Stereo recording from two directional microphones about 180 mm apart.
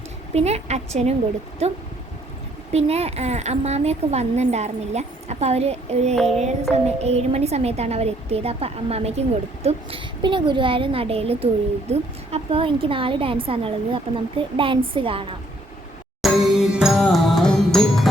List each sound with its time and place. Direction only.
0.3 s a woman's voice: 35° right (ahead or behind)
16.2 s music: 5° right (ahead or behind)